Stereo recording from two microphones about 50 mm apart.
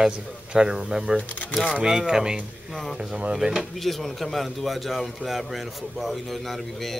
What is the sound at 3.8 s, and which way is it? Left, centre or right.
A man's voice, centre.